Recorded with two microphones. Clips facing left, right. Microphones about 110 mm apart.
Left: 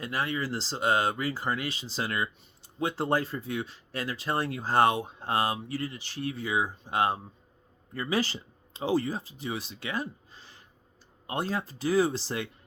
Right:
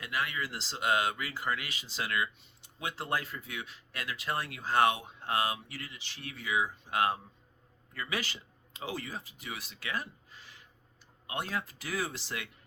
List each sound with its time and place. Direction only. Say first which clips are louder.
0.0 s speech: left 4 dB; 35° left (ahead or behind)